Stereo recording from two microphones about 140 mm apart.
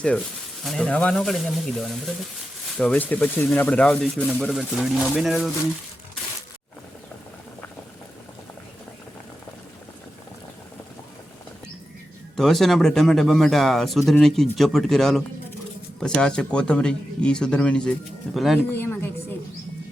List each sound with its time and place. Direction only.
0.6 s speech: 5° left (ahead or behind)
12.4 s speech: centre (ahead or behind)
18.7 s speech: 15° left (ahead or behind)